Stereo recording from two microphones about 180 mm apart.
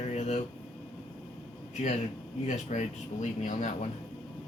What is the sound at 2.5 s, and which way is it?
Speech, 40° left (ahead or behind).